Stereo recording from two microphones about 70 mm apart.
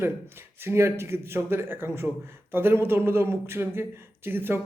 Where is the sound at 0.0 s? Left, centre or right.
Right.